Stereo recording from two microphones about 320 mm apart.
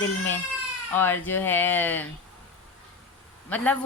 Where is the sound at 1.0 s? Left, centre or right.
Centre.